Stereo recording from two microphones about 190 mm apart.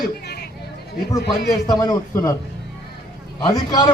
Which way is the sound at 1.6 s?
20° left (ahead or behind).